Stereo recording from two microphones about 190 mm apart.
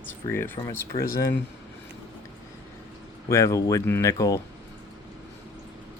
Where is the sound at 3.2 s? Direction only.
15° left (ahead or behind).